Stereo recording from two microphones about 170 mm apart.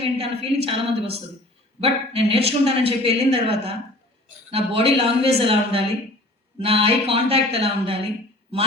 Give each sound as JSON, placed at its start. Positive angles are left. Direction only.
{"t": 0.0, "sound": "speech", "side_deg": -35}